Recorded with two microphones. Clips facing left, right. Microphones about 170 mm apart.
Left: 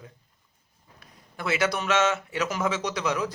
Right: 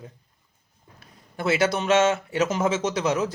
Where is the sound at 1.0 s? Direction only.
30° right (ahead or behind).